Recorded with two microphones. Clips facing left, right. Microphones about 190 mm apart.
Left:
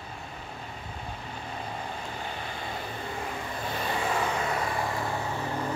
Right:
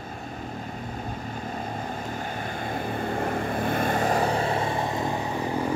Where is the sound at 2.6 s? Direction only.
50° right (ahead or behind); by 5.2 s 20° right (ahead or behind).